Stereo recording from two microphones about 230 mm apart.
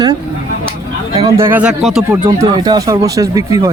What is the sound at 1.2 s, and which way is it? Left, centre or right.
Speech, centre.